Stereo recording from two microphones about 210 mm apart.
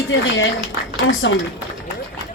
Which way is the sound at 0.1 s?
70° left (ahead or behind).